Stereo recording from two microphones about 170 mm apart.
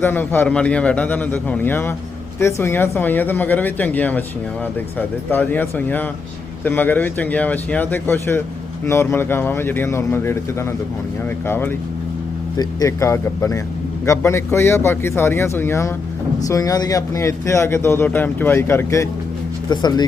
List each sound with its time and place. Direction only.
0.0 s speech: 10° left (ahead or behind)